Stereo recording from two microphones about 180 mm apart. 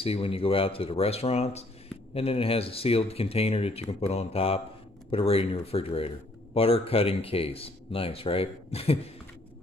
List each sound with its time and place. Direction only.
0.0 s speech: 30° left (ahead or behind)